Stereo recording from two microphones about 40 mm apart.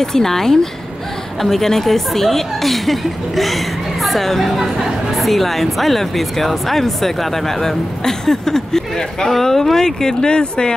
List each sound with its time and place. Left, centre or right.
0.0 s speech: centre